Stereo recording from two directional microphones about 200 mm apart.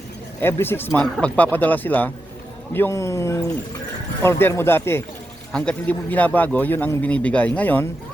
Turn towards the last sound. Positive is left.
turn(degrees=10)  # may be behind; listen again after turning